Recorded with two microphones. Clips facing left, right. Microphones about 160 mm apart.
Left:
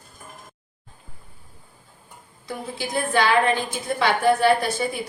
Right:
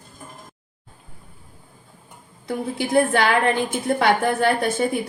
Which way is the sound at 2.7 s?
55° right (ahead or behind).